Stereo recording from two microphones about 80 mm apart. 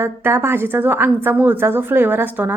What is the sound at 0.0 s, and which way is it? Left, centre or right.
A woman's voice, right.